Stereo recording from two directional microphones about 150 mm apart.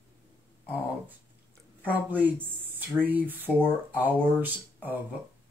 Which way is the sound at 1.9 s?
10° right (ahead or behind).